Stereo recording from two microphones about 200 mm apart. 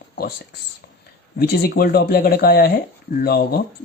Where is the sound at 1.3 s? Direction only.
50° left (ahead or behind).